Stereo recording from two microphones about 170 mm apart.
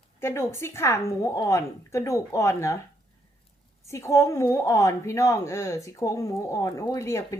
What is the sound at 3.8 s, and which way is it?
A woman's voice, 15° left (ahead or behind).